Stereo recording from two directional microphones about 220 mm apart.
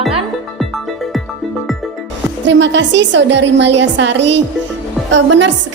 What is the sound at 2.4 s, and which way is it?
A woman's voice, 55° right (ahead or behind).